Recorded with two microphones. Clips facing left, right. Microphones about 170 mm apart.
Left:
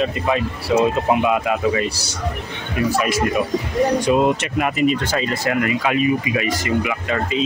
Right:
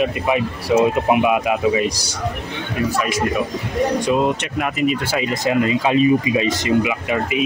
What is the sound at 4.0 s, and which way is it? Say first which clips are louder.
Speech: left 1 dB; centre (ahead or behind).